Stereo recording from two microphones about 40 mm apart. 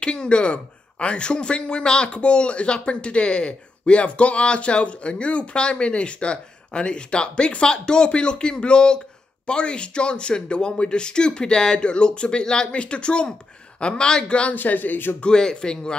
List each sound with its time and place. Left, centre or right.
0.0 s speech: left
14.5 s a man's voice: left
15.1 s speech: left